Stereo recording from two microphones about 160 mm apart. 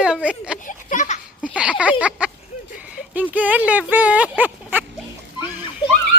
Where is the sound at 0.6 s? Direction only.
50° left (ahead or behind).